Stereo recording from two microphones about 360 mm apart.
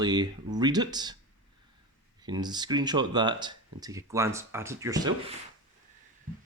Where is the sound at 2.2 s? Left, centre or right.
Centre.